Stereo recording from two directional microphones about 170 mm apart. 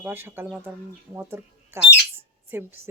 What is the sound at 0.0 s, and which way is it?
Speech, 10° right (ahead or behind).